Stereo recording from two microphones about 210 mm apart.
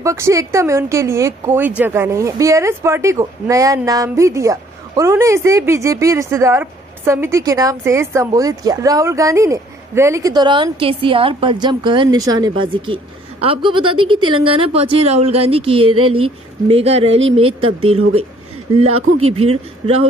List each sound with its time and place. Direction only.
0.0 s a woman's voice: 15° right (ahead or behind)
15.9 s speech: 90° right
16.2 s a woman's voice: 25° right (ahead or behind)
18.9 s speech: 90° right
19.2 s a woman's voice: 30° right (ahead or behind)